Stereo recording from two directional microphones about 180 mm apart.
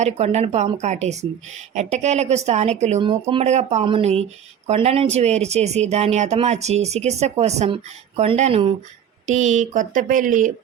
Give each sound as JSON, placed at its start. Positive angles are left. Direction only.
{"t": 0.0, "sound": "speech", "side_deg": -40}